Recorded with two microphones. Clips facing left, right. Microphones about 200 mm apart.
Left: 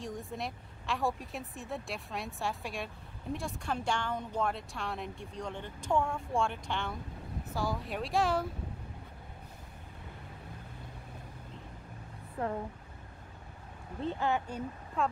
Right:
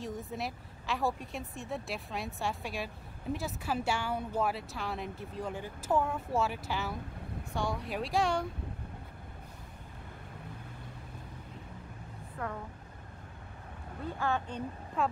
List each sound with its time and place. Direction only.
0.0 s speech: centre (ahead or behind)
12.4 s speech: 30° left (ahead or behind)
14.0 s speech: 20° left (ahead or behind)
15.0 s speech: centre (ahead or behind)